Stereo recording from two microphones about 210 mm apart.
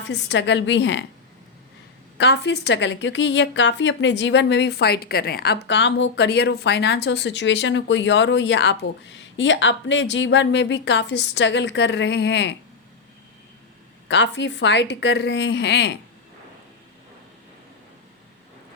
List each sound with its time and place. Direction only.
0.0 s a woman's voice: 55° left (ahead or behind)
2.1 s a woman's voice: 55° left (ahead or behind)
14.1 s a woman's voice: 55° left (ahead or behind)